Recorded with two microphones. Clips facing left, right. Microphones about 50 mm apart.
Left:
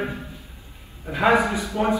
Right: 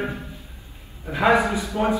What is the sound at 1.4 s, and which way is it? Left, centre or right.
Speech, left.